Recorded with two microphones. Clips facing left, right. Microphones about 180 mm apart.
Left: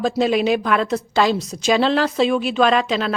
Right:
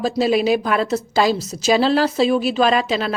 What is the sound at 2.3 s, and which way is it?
Speech, 40° right (ahead or behind).